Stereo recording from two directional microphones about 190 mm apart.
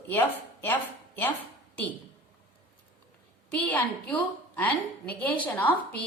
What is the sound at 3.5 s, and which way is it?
A woman's voice, 10° left (ahead or behind).